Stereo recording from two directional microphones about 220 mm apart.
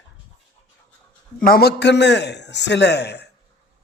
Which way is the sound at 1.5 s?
45° left (ahead or behind).